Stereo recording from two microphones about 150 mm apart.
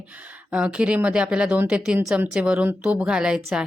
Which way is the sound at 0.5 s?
5° right (ahead or behind).